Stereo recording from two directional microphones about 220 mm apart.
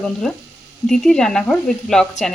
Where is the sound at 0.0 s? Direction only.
5° left (ahead or behind).